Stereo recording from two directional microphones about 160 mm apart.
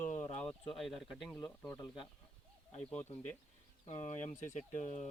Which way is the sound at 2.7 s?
40° left (ahead or behind).